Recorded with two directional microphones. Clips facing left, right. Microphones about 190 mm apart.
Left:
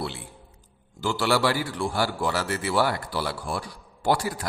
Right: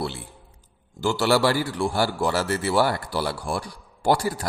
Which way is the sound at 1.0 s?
40° right (ahead or behind).